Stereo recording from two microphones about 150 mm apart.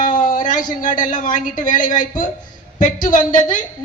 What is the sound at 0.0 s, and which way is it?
A man's voice, 60° left (ahead or behind).